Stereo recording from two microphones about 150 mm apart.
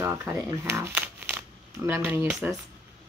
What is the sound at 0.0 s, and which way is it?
Speech, 15° right (ahead or behind).